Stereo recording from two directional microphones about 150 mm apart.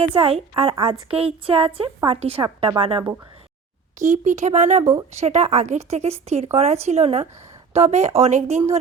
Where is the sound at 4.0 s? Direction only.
55° right (ahead or behind).